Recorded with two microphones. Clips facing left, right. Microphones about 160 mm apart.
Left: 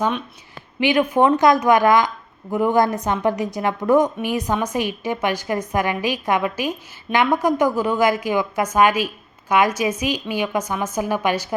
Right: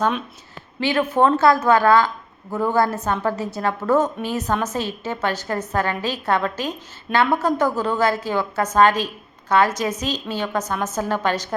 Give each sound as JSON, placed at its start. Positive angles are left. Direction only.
{"t": 0.8, "sound": "a woman's voice", "side_deg": 15}